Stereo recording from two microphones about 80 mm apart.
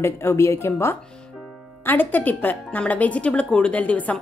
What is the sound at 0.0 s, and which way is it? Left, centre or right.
A woman's voice, left.